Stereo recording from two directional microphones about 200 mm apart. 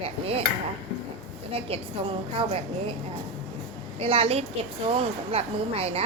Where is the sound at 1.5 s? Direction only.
25° right (ahead or behind).